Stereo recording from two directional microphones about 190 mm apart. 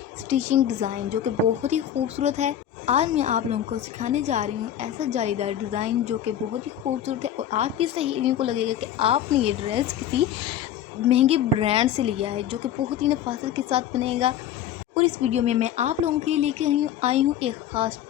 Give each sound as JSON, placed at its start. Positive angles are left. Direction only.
{"t": 0.3, "sound": "a woman's voice", "side_deg": -35}